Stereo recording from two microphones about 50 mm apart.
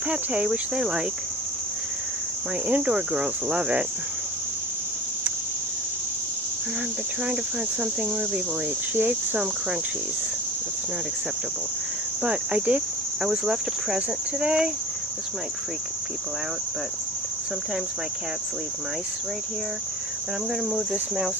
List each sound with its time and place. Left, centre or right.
0.1 s speech: right
2.6 s speech: right
9.0 s speech: right
12.2 s speech: right